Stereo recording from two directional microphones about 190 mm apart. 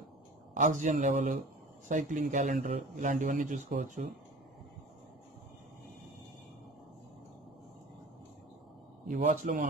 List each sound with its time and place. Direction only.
0.6 s a man's voice: 45° right (ahead or behind)
9.0 s speech: 40° right (ahead or behind)